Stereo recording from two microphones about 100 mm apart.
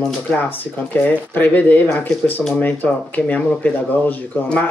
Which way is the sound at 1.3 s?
20° left (ahead or behind).